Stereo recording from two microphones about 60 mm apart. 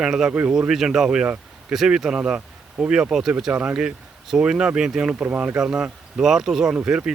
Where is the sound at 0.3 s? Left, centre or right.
Centre.